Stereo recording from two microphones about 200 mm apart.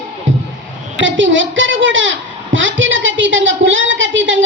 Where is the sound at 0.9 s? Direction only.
70° right (ahead or behind).